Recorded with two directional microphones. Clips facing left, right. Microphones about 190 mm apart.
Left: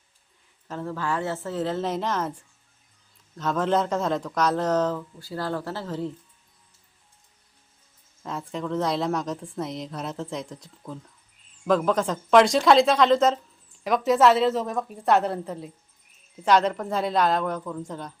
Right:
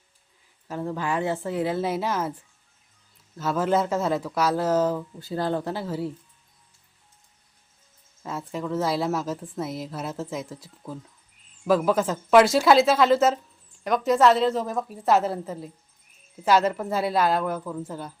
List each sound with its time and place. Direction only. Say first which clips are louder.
0.7 s a woman's voice: right 1 dB; 15° right (ahead or behind)
5.2 s a woman's voice: right 4 dB; 20° right (ahead or behind)
8.2 s a woman's voice: even; 5° right (ahead or behind)